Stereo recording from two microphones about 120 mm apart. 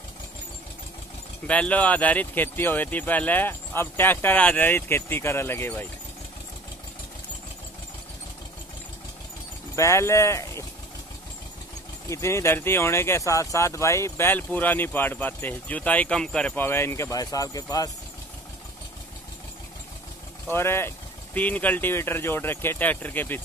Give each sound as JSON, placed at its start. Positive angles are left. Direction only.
{"t": 1.5, "sound": "speech", "side_deg": 10}
{"t": 9.8, "sound": "speech", "side_deg": 25}
{"t": 12.1, "sound": "speech", "side_deg": 25}
{"t": 20.4, "sound": "speech", "side_deg": 20}